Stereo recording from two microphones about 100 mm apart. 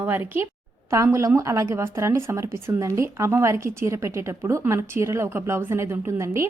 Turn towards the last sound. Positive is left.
turn(degrees=-30)  # may be behind; listen again after turning